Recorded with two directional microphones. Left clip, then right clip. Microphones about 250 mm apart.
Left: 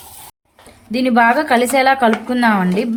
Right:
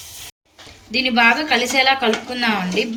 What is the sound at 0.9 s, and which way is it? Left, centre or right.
Speech, left.